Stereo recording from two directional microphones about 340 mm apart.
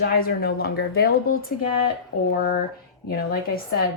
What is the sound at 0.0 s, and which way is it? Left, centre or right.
Speech, left.